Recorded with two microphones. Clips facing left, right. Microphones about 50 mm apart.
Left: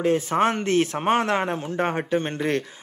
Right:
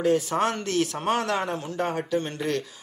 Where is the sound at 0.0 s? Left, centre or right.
Left.